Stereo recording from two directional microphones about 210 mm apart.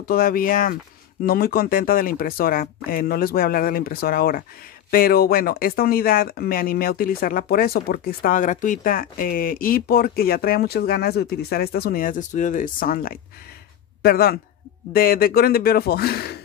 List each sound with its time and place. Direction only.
0.1 s speech: 45° left (ahead or behind)